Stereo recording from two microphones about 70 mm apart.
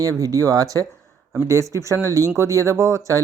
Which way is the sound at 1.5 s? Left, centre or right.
Right.